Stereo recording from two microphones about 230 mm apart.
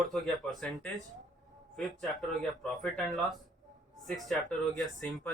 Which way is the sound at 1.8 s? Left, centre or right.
Centre.